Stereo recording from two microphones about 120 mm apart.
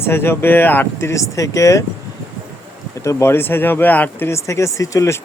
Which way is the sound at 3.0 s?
25° left (ahead or behind).